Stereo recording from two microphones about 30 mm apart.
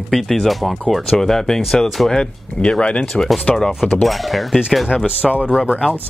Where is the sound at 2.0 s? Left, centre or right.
Centre.